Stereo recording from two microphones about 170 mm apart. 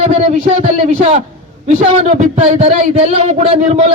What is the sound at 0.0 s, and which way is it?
A man's voice, 40° right (ahead or behind).